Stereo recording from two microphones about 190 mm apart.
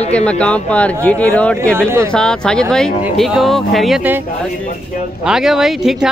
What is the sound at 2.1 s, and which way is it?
Speech, 5° left (ahead or behind).